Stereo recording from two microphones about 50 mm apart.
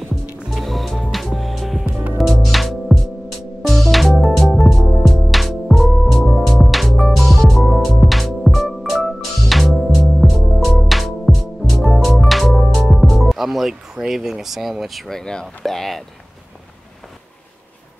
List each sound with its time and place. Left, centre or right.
0.5 s music: centre
12.7 s speech: centre